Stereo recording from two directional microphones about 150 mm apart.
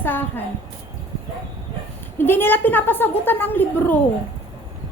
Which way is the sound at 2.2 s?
15° left (ahead or behind).